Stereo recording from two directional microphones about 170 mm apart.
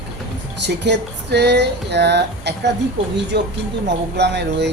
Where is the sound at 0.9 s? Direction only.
80° right.